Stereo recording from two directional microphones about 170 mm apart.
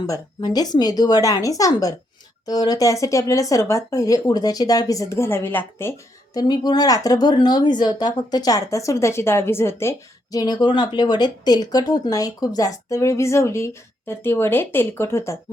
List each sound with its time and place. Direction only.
0.1 s speech: 25° left (ahead or behind)
6.3 s speech: 25° left (ahead or behind)